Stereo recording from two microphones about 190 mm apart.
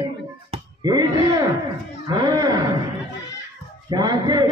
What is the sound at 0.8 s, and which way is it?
A man's voice, 20° right (ahead or behind).